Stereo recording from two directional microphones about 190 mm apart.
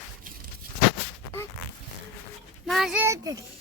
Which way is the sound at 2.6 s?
Centre (ahead or behind).